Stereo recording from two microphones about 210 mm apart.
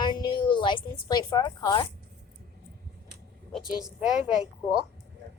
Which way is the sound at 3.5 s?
Centre (ahead or behind).